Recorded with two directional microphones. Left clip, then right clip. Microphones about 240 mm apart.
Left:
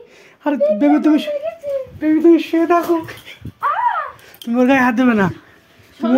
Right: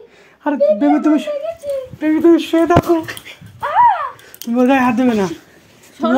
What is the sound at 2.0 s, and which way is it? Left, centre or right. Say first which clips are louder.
Speech: even; centre.